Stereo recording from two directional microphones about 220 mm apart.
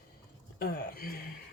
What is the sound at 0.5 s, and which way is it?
Speech, 45° left (ahead or behind).